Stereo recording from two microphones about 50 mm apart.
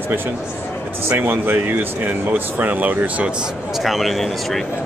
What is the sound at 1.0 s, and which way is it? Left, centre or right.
Speech, right.